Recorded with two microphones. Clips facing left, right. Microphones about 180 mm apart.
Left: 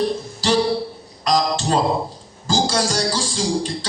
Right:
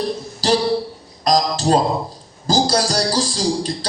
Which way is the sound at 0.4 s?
40° right (ahead or behind).